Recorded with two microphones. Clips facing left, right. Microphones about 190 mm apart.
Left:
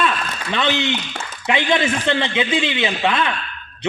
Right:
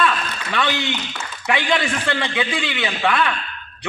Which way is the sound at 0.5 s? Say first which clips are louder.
Left 2 dB; 20° left (ahead or behind).